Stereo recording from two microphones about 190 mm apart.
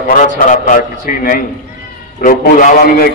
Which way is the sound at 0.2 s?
40° left (ahead or behind).